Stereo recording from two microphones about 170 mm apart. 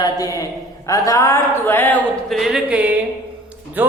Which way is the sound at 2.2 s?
Centre (ahead or behind).